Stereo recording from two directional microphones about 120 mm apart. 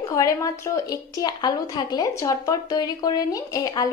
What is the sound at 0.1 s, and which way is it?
A woman's voice, 25° left (ahead or behind).